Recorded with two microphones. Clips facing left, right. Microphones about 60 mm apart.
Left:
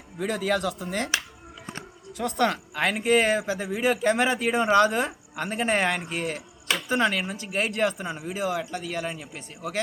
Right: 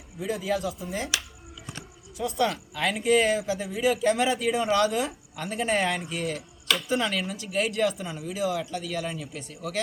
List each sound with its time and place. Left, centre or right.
0.2 s speech: left
2.1 s speech: left
6.7 s a sound: left
6.9 s speech: left